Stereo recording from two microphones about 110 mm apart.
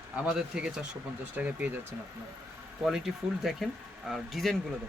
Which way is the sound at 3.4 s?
Centre (ahead or behind).